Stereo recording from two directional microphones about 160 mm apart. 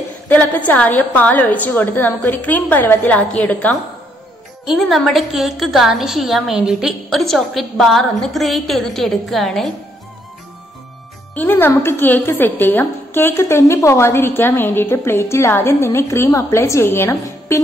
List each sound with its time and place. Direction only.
0.3 s a woman's voice: 10° left (ahead or behind)
11.3 s a woman's voice: 10° left (ahead or behind)